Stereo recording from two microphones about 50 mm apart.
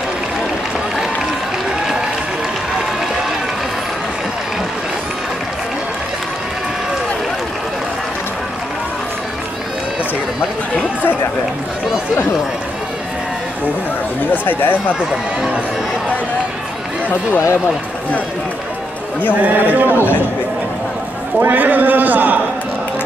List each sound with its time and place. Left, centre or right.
14.3 s speech: left
19.4 s a man's voice: right
21.4 s a man's voice: right